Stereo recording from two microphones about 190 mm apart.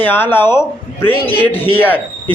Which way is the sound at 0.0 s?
10° left (ahead or behind).